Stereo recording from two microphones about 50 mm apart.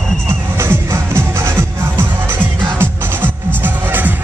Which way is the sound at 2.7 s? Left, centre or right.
Right.